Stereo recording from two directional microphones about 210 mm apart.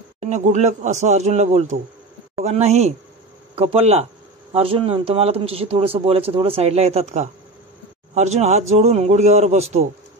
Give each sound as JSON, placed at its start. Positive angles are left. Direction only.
{"t": 0.2, "sound": "speech", "side_deg": -35}